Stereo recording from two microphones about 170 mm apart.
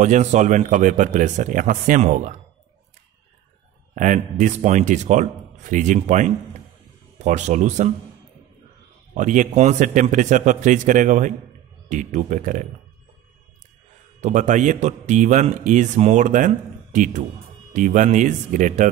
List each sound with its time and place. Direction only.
0.0 s speech: 45° right (ahead or behind)
3.9 s speech: 45° right (ahead or behind)
9.1 s speech: 50° right (ahead or behind)
14.2 s speech: 45° right (ahead or behind)